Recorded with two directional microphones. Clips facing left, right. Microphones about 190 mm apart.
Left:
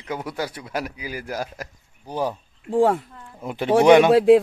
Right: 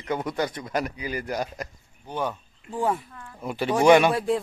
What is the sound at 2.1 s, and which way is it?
Speech, 35° left (ahead or behind).